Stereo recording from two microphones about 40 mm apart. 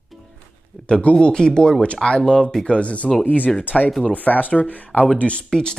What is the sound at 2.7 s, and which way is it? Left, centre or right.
Speech, left.